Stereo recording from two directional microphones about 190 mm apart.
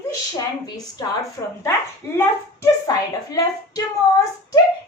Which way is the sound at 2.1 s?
15° left (ahead or behind).